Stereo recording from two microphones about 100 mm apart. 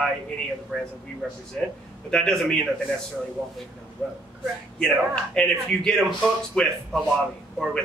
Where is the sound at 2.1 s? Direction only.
5° left (ahead or behind).